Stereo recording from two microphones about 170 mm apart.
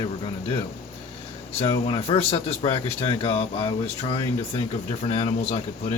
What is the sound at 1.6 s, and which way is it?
Speech, 30° left (ahead or behind).